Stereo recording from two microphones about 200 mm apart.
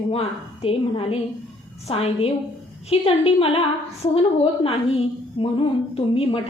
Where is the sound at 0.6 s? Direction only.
30° left (ahead or behind).